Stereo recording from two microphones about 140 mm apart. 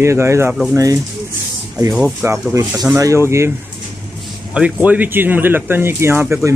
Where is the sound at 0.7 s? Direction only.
25° right (ahead or behind).